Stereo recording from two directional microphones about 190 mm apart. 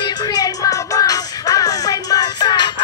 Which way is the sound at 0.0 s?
20° left (ahead or behind).